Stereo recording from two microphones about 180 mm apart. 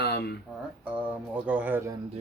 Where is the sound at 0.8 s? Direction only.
10° right (ahead or behind).